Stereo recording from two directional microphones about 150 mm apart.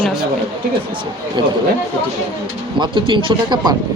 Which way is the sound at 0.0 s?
5° right (ahead or behind).